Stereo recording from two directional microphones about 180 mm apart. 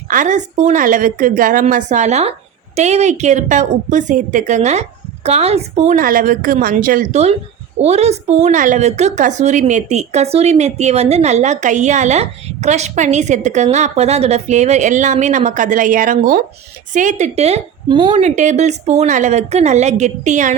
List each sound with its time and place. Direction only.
0.1 s a woman's voice: 45° right (ahead or behind)